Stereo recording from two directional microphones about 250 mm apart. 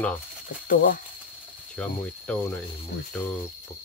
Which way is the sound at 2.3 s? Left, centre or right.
Centre.